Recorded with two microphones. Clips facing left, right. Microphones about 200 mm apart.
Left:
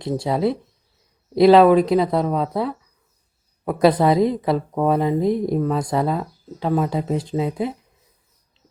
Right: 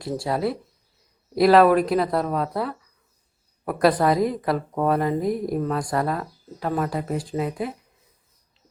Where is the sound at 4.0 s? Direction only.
15° left (ahead or behind).